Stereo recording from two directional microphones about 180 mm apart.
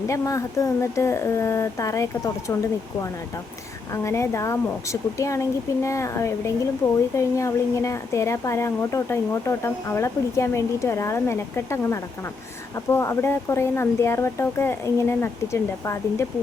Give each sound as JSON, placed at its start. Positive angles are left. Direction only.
{"t": 0.1, "sound": "speech", "side_deg": 15}
{"t": 3.9, "sound": "speech", "side_deg": 15}